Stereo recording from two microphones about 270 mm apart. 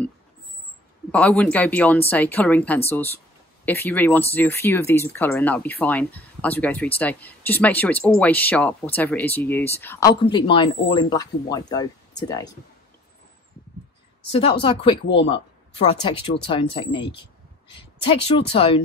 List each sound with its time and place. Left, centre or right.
1.1 s speech: centre
14.3 s speech: centre